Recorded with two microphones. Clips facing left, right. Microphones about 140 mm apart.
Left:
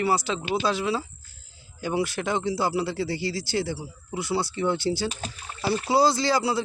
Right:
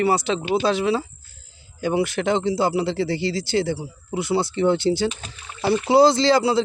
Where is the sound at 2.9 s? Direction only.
60° right (ahead or behind).